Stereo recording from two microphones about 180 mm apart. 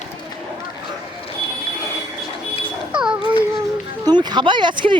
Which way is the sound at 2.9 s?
5° right (ahead or behind).